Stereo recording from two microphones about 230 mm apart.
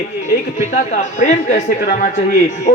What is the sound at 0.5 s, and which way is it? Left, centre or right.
A woman's voice, left.